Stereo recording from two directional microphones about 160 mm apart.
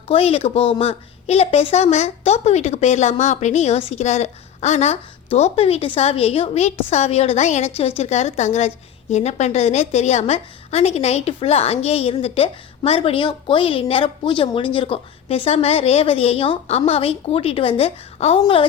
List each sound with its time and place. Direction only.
0.1 s speech: 40° left (ahead or behind)